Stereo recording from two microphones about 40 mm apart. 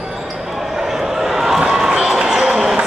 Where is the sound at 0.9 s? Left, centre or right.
Centre.